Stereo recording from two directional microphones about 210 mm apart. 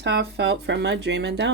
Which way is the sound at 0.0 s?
55° right (ahead or behind).